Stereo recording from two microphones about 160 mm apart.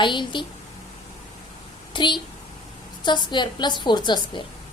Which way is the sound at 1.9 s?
30° left (ahead or behind).